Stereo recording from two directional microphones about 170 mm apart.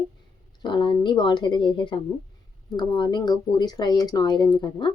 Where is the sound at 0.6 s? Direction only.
25° left (ahead or behind).